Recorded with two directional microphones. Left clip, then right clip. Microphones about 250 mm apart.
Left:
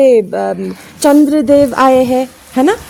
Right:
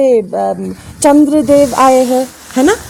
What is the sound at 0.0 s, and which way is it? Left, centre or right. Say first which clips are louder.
Speech: left 1 dB; left.